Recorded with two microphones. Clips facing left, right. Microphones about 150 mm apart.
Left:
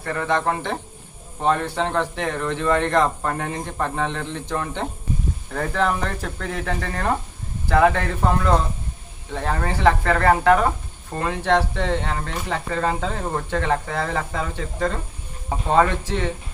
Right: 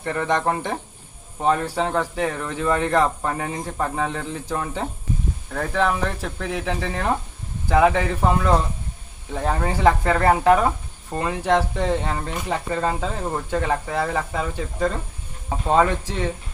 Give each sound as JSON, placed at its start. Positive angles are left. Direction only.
{"t": 0.0, "sound": "speech", "side_deg": -20}